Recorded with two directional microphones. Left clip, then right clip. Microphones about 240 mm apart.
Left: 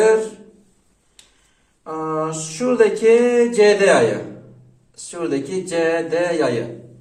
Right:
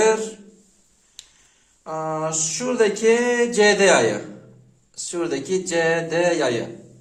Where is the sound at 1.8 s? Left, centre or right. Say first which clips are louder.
Left 2 dB; right.